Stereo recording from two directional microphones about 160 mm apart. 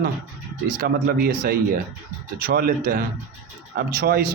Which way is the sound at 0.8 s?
70° right (ahead or behind).